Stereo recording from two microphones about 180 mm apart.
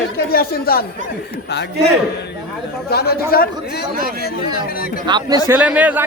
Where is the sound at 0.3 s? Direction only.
55° left (ahead or behind).